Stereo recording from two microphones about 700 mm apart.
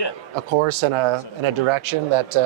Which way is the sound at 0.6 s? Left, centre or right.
Right.